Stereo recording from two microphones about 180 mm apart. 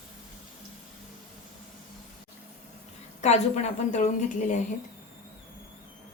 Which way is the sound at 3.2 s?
40° left (ahead or behind).